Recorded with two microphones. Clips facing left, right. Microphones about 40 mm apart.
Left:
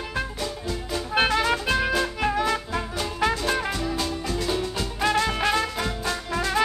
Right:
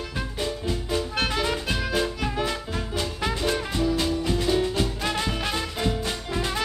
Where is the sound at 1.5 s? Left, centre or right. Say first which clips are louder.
Left 4 dB; left.